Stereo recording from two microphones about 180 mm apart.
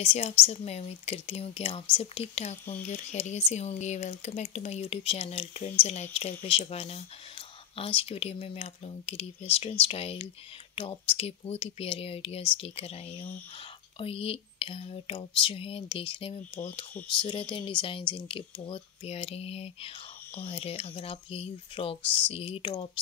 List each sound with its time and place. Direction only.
0.0 s speech: 35° left (ahead or behind)
17.6 s speech: 25° left (ahead or behind)